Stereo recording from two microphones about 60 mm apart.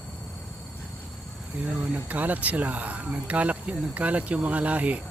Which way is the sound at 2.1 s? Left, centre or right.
Right.